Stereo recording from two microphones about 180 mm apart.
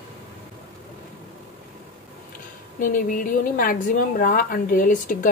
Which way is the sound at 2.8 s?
50° left (ahead or behind).